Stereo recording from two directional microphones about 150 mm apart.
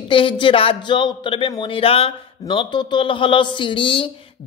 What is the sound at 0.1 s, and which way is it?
Speech, 35° left (ahead or behind).